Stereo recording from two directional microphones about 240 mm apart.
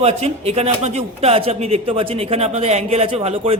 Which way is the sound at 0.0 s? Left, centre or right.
Right.